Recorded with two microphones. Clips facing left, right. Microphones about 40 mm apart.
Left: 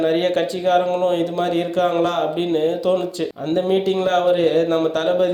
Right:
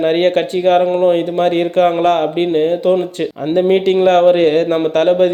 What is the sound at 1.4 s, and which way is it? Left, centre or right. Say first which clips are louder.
Speech: right 9 dB; right.